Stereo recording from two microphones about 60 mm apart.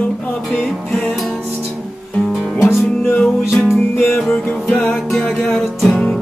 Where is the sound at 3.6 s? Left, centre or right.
Left.